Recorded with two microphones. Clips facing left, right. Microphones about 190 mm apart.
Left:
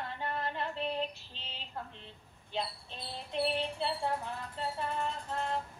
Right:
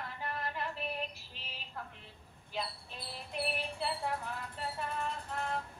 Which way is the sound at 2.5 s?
25° left (ahead or behind).